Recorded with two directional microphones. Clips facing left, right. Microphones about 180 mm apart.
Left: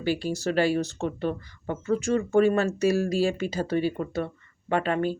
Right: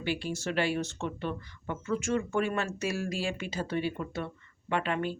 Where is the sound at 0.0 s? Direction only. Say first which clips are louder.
Left 6 dB; 40° left (ahead or behind).